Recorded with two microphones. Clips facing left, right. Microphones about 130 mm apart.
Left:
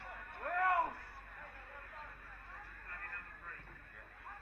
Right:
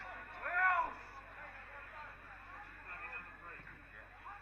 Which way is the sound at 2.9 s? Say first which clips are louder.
Left 2 dB; 25° right (ahead or behind).